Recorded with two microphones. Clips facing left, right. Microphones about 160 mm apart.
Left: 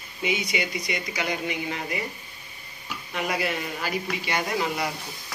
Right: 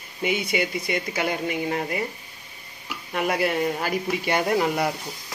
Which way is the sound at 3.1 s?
50° right (ahead or behind).